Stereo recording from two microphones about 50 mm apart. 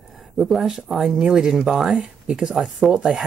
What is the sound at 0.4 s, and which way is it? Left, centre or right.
Speech, centre.